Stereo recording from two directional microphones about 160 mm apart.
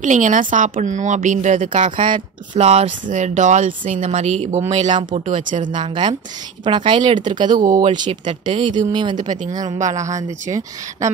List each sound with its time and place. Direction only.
0.0 s speech: 50° right (ahead or behind)
5.7 s speech: 30° right (ahead or behind)